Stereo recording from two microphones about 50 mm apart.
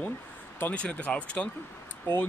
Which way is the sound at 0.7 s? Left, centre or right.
Left.